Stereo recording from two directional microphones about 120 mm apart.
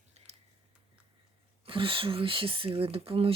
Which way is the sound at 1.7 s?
45° right (ahead or behind).